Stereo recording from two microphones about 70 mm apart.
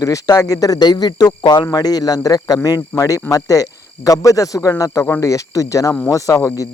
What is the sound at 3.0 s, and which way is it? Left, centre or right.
A man's voice, left.